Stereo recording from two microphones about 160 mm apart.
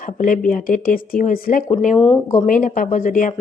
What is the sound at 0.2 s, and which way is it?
A woman's voice, 55° left (ahead or behind).